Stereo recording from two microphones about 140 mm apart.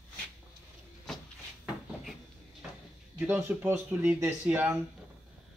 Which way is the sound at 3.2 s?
15° right (ahead or behind).